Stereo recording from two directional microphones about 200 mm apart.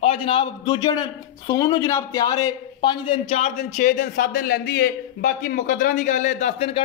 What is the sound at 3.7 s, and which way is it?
A man's voice, 40° left (ahead or behind).